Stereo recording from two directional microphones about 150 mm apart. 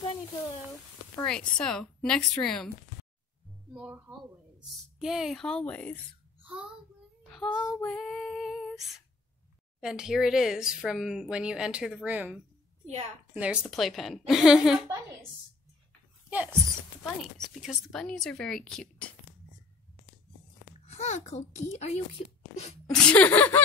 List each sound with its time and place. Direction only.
1.2 s speech: 5° left (ahead or behind)
3.7 s speech: 5° right (ahead or behind); by 5.9 s 10° left (ahead or behind)
6.4 s a child's voice: 5° right (ahead or behind)
7.2 s child singing: centre (ahead or behind)
7.8 s female singing: 5° left (ahead or behind)
9.8 s speech: 5° right (ahead or behind)
16.3 s speech: 15° right (ahead or behind)
17.0 s speech: centre (ahead or behind)
20.8 s a child's voice: 50° left (ahead or behind)
22.9 s speech: 10° left (ahead or behind)